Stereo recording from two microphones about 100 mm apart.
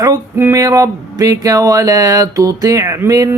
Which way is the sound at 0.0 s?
30° right (ahead or behind).